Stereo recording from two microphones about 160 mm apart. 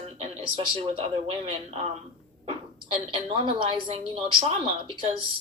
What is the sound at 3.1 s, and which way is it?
A woman's voice, 35° right (ahead or behind).